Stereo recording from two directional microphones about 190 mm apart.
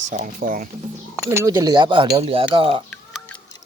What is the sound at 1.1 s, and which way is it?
Speech, 15° right (ahead or behind).